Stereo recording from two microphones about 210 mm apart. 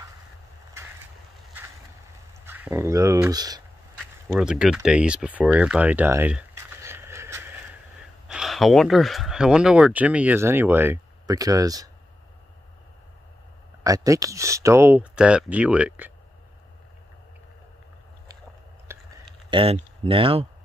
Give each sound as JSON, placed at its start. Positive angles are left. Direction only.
{"t": 2.4, "sound": "speech", "side_deg": -10}
{"t": 4.3, "sound": "speech", "side_deg": -5}
{"t": 8.3, "sound": "speech", "side_deg": 0}
{"t": 13.8, "sound": "speech", "side_deg": -15}
{"t": 18.9, "sound": "a sound", "side_deg": -10}
{"t": 19.5, "sound": "speech", "side_deg": -25}